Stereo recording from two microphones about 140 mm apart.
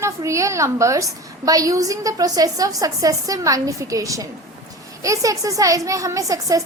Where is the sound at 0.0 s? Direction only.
20° right (ahead or behind).